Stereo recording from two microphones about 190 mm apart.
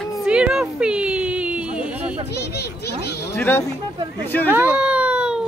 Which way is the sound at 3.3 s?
10° left (ahead or behind).